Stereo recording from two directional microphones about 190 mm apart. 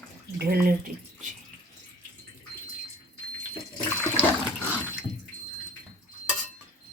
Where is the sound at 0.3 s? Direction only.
50° right (ahead or behind).